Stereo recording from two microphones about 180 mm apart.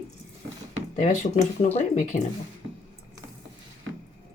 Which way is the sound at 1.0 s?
40° left (ahead or behind).